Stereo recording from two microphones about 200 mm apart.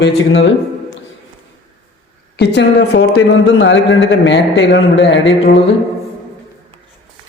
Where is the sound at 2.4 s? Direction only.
55° left (ahead or behind).